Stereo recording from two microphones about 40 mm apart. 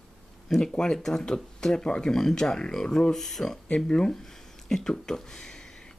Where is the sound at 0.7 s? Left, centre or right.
Left.